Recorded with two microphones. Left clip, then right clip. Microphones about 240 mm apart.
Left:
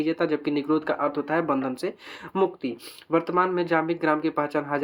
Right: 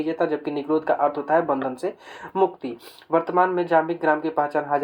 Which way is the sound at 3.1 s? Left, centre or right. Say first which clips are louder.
Right 3 dB; left.